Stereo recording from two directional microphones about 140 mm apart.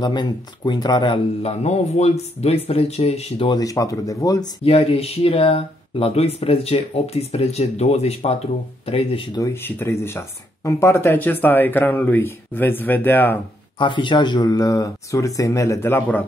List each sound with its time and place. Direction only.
0.0 s speech: 30° left (ahead or behind)
3.5 s speech: 25° left (ahead or behind)
4.6 s speech: 45° left (ahead or behind)
9.4 s speech: 15° left (ahead or behind)
13.7 s speech: 35° left (ahead or behind); by 16.3 s 15° left (ahead or behind)